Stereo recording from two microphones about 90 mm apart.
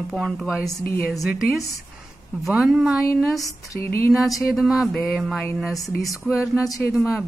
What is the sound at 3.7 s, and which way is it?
Speech, 30° left (ahead or behind).